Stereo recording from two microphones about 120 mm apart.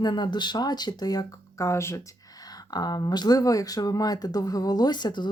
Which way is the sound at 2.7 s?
35° left (ahead or behind).